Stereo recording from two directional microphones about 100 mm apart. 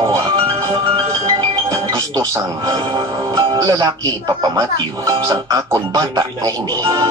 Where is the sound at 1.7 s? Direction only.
35° right (ahead or behind).